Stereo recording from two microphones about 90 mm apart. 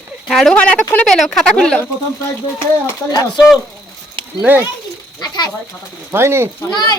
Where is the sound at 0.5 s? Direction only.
10° left (ahead or behind).